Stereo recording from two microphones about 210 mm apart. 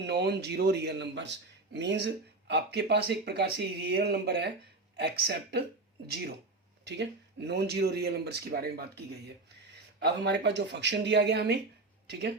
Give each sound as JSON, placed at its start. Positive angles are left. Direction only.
{"t": 0.0, "sound": "a man's voice", "side_deg": -55}
{"t": 6.8, "sound": "speech", "side_deg": -55}
{"t": 10.0, "sound": "a man's voice", "side_deg": -55}